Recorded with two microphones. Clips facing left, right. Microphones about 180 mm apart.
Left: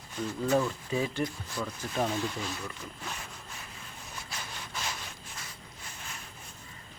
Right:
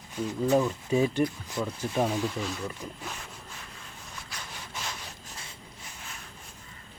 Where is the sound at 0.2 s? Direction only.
15° right (ahead or behind).